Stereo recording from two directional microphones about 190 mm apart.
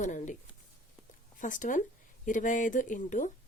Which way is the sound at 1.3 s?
45° left (ahead or behind).